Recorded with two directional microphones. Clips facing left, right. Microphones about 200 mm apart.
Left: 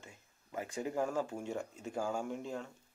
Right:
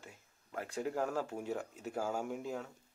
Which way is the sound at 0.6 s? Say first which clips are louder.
Even; centre (ahead or behind).